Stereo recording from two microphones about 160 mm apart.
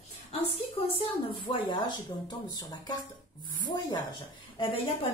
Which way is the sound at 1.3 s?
30° left (ahead or behind).